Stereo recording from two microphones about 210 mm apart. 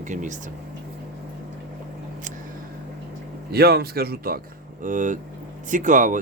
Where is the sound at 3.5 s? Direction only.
50° right (ahead or behind).